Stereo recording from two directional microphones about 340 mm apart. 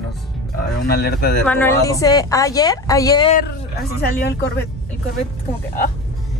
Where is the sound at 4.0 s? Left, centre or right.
Left.